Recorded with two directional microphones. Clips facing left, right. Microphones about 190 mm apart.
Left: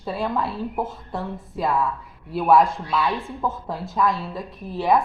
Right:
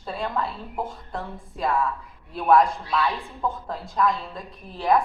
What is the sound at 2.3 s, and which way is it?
Speech, 5° left (ahead or behind).